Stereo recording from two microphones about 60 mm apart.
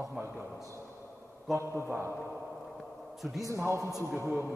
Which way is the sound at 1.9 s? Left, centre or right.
Right.